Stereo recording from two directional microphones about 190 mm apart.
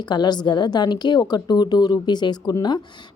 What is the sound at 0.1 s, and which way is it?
Speech, 25° left (ahead or behind).